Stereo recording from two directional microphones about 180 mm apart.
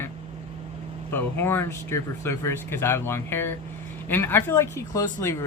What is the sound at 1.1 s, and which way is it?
Speech, 10° left (ahead or behind).